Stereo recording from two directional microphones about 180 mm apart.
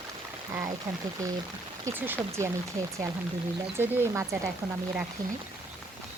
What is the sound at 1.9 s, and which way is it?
Speech, 10° right (ahead or behind).